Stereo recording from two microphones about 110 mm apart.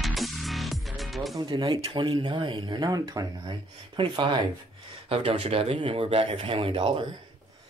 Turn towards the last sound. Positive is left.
turn(degrees=-55)  # may be behind; listen again after turning